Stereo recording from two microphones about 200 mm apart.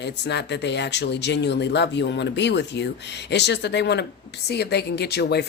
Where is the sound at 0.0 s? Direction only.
60° left (ahead or behind).